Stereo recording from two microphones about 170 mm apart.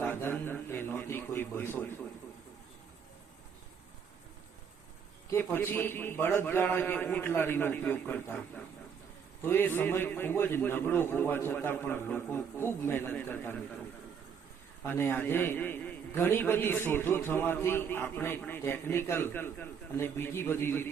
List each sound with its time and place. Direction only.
0.0 s a man's voice: 10° left (ahead or behind)
5.3 s a man's voice: 15° left (ahead or behind)
14.8 s a man's voice: 15° left (ahead or behind)